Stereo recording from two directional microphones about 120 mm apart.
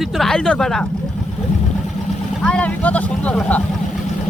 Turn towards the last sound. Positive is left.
turn(degrees=10)  # may be behind; listen again after turning